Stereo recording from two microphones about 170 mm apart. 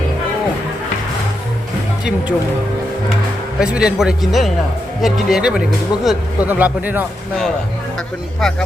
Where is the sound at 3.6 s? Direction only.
5° right (ahead or behind).